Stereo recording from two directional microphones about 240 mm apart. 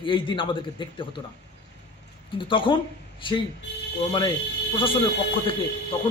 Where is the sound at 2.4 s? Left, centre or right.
Left.